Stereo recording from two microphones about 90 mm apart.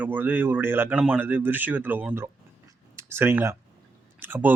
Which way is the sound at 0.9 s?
15° right (ahead or behind).